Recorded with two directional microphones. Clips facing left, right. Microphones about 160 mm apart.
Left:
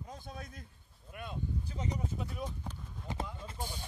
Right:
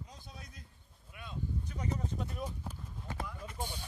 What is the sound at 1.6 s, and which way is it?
Speech, 20° left (ahead or behind).